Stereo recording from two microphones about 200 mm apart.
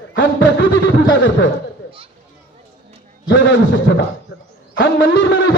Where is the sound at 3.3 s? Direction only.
65° left (ahead or behind).